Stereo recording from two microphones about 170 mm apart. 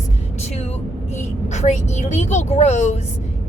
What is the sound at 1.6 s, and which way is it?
Speech, 45° left (ahead or behind).